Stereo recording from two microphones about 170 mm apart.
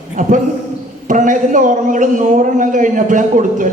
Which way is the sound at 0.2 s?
50° right (ahead or behind).